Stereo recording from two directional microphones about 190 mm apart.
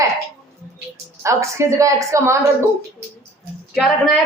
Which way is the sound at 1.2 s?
15° right (ahead or behind).